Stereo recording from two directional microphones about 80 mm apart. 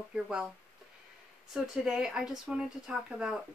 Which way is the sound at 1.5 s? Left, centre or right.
Centre.